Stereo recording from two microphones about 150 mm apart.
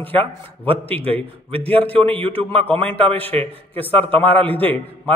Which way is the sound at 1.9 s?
40° right (ahead or behind).